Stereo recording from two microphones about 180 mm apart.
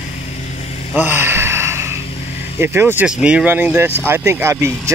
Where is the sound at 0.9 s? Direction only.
10° right (ahead or behind).